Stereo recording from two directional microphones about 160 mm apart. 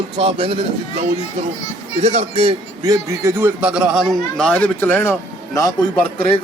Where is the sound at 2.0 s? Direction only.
45° right (ahead or behind).